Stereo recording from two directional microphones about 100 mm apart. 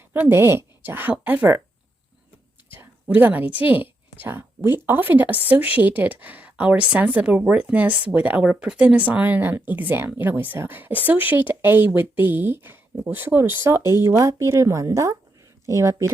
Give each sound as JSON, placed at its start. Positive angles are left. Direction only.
{"t": 0.1, "sound": "speech", "side_deg": -20}
{"t": 2.7, "sound": "a woman's voice", "side_deg": -20}